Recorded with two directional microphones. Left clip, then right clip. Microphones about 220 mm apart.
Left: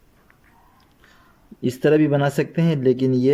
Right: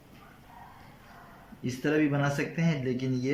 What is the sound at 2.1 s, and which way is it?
Speech, 15° left (ahead or behind).